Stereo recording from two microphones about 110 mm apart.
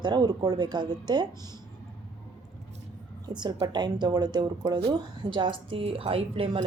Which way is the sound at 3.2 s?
40° right (ahead or behind).